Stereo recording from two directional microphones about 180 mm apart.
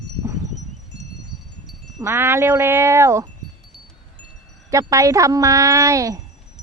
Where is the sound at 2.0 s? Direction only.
15° right (ahead or behind).